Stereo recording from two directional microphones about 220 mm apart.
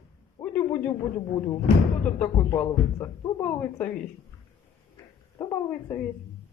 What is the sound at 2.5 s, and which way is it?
Speech, 10° left (ahead or behind).